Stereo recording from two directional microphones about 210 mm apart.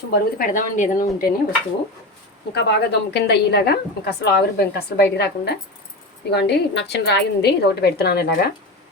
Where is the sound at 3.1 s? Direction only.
50° left (ahead or behind).